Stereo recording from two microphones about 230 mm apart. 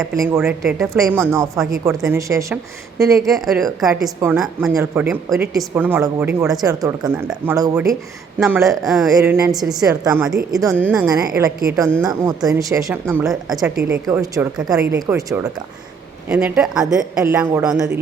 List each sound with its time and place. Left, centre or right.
0.3 s a woman's voice: centre
3.0 s a woman's voice: centre
6.7 s a woman's voice: centre
8.4 s a woman's voice: centre
8.9 s a woman's voice: centre
9.1 s a woman's voice: centre
11.2 s a woman's voice: centre
14.5 s a woman's voice: centre
14.9 s a woman's voice: centre
16.3 s a woman's voice: centre